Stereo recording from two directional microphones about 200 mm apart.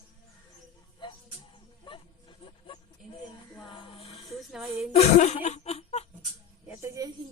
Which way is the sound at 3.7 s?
25° left (ahead or behind).